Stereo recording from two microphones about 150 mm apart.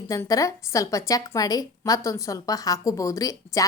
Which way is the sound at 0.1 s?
20° left (ahead or behind).